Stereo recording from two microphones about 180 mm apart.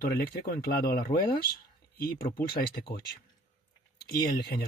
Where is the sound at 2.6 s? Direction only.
60° left (ahead or behind).